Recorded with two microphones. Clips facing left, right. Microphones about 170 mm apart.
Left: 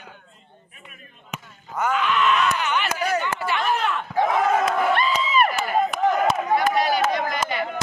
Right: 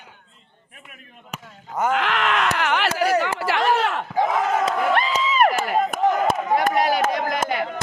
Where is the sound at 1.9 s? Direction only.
90° right.